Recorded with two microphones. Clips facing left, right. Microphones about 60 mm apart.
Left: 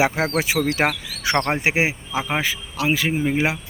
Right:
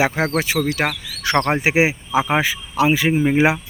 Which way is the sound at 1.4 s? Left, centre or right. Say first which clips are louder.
Right 6 dB; centre.